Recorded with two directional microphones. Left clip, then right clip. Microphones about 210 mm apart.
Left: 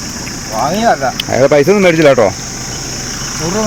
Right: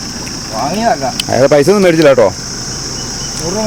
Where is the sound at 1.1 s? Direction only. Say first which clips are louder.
Even; 10° right (ahead or behind).